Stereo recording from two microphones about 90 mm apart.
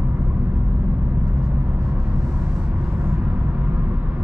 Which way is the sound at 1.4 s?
10° right (ahead or behind).